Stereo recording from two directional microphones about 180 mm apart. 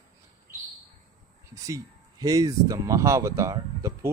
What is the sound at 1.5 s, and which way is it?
Speech, 20° right (ahead or behind).